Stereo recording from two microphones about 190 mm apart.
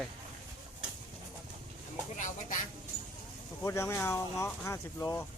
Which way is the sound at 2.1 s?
40° left (ahead or behind).